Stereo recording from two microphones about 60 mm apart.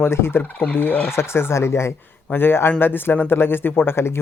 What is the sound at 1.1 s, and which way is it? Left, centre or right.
Speech, left.